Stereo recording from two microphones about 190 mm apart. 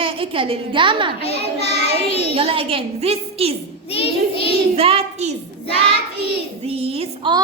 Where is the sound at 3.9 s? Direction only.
30° left (ahead or behind).